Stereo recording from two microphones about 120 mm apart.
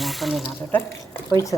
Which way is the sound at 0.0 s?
Centre (ahead or behind).